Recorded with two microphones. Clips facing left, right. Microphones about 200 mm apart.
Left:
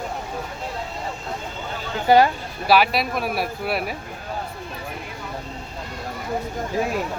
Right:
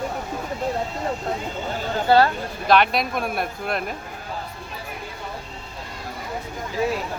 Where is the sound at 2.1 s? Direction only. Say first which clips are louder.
Left 1 dB; 15° left (ahead or behind).